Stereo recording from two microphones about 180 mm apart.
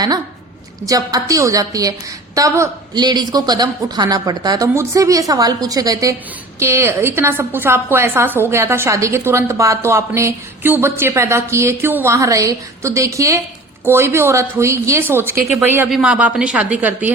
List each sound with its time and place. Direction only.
0.9 s a woman's voice: 20° right (ahead or behind)